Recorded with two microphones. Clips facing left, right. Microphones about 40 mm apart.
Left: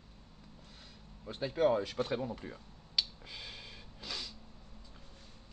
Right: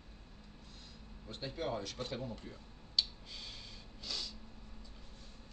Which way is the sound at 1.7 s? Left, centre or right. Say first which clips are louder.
Left 10 dB; left.